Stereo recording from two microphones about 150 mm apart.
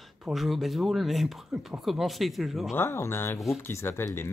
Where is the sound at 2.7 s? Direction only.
15° left (ahead or behind).